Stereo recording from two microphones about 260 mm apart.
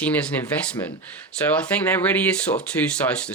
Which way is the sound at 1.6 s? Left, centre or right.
Centre.